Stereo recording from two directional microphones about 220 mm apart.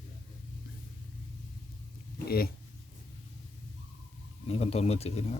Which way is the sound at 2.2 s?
45° left (ahead or behind).